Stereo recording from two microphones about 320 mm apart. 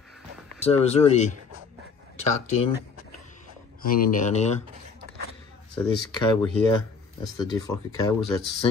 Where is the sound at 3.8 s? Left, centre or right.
Left.